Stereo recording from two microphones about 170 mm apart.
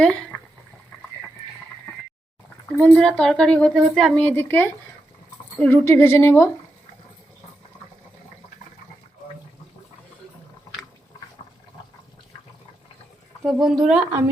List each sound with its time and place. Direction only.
0.0 s speech: 5° left (ahead or behind)
2.8 s a woman's voice: 5° left (ahead or behind)
13.4 s a woman's voice: centre (ahead or behind)